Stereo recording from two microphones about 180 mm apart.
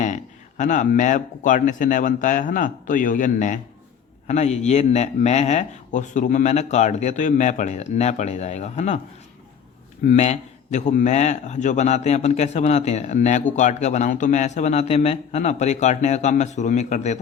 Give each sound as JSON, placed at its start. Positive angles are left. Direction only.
{"t": 0.0, "sound": "speech", "side_deg": 40}
{"t": 10.1, "sound": "speech", "side_deg": 40}